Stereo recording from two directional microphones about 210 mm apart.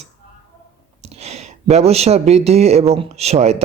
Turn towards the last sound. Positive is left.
turn(degrees=-30)  # may be behind; listen again after turning